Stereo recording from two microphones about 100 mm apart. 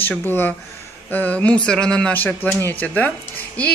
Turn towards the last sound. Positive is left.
turn(degrees=15)  # may be behind; listen again after turning